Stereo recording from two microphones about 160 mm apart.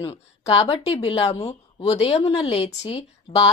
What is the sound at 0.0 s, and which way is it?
Speech, 35° left (ahead or behind).